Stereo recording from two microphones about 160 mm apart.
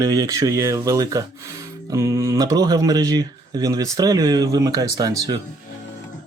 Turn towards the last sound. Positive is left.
turn(degrees=-20)  # may be behind; listen again after turning